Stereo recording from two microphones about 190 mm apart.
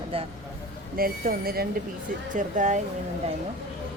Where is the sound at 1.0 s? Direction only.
50° right (ahead or behind).